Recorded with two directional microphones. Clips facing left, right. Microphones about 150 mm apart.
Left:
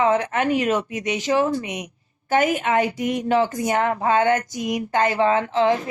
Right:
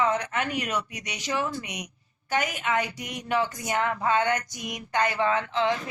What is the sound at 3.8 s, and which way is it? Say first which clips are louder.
Speech: left 5 dB; 35° left (ahead or behind).